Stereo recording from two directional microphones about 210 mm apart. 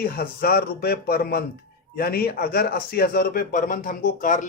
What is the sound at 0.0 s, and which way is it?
Speech, 45° left (ahead or behind).